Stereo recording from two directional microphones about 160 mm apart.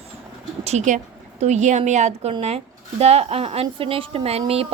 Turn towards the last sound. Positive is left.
turn(degrees=-40)  # may be behind; listen again after turning